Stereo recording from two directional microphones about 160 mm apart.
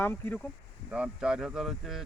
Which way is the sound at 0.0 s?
15° left (ahead or behind).